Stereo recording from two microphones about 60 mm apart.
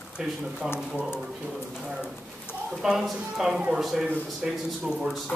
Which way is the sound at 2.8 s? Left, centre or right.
Centre.